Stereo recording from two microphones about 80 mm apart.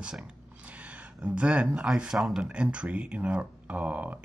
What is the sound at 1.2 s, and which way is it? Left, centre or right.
Speech, centre.